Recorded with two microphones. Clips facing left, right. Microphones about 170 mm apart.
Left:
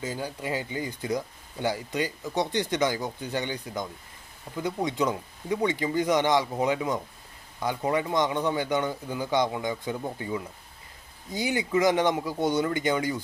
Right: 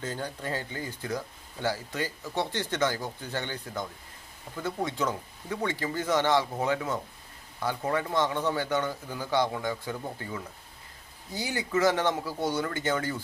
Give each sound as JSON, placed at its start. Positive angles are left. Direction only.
{"t": 0.0, "sound": "speech", "side_deg": 10}